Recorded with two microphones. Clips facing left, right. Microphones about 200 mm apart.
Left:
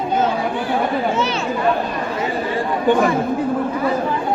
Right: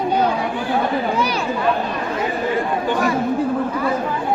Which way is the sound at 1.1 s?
25° left (ahead or behind).